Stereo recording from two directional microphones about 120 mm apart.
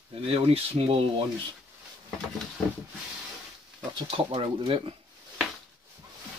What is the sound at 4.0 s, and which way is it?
Speech, 50° right (ahead or behind).